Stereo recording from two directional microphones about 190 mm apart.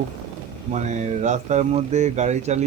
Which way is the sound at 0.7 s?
40° right (ahead or behind).